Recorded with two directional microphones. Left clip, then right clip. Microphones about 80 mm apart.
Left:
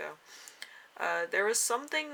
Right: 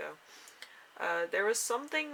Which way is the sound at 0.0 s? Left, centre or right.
Left.